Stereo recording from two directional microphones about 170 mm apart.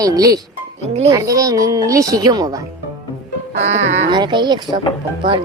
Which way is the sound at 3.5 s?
40° right (ahead or behind).